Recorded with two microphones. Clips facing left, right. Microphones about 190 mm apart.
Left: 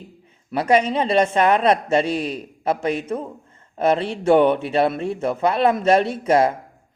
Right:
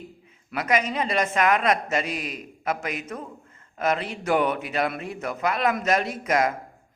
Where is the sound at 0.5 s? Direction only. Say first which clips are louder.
Left 7 dB; 30° left (ahead or behind).